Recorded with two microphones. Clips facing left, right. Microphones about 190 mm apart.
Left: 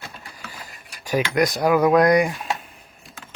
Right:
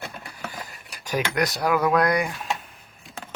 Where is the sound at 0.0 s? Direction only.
65° right (ahead or behind).